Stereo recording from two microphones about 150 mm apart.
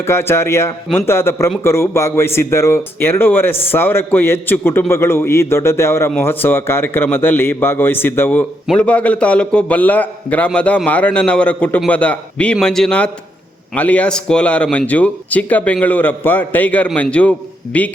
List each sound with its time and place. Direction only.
0.0 s a man's voice: 15° left (ahead or behind)